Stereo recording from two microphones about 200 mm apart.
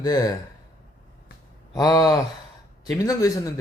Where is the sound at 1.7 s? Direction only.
20° left (ahead or behind).